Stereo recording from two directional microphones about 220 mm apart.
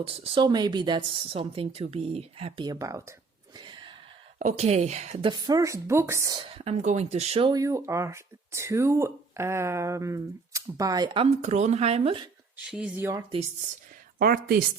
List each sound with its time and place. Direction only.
0.0 s speech: 25° right (ahead or behind)
3.6 s gasp: 20° right (ahead or behind)
4.4 s a woman's voice: 30° right (ahead or behind)
5.3 s speech: 15° right (ahead or behind)
12.5 s speech: 5° right (ahead or behind)
14.2 s speech: 40° right (ahead or behind)